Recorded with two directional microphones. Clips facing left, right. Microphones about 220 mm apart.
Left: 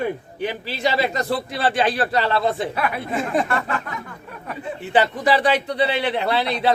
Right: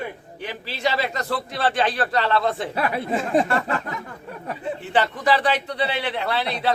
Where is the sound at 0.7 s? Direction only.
15° left (ahead or behind).